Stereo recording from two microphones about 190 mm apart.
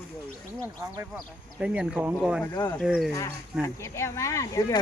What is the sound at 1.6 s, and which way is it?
Speech, 5° right (ahead or behind).